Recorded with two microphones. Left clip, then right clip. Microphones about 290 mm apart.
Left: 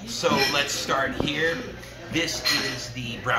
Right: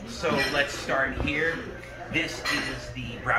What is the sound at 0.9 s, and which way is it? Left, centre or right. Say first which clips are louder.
Speech: left 1 dB; centre.